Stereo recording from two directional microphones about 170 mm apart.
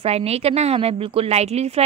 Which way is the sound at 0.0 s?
35° right (ahead or behind).